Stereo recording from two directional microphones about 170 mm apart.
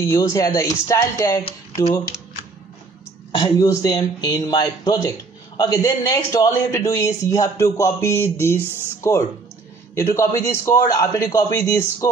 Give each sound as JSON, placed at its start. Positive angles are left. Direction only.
{"t": 0.0, "sound": "a man's voice", "side_deg": 20}
{"t": 3.3, "sound": "a man's voice", "side_deg": 25}